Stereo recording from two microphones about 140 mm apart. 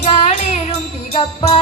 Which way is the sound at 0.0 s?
50° left (ahead or behind).